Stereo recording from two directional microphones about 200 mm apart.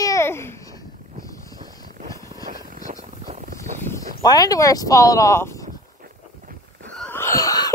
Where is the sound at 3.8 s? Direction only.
10° left (ahead or behind).